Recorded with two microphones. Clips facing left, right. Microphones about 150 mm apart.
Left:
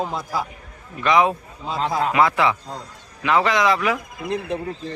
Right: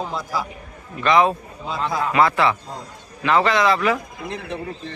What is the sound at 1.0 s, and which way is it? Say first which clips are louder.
Speech: right 1 dB; 15° left (ahead or behind).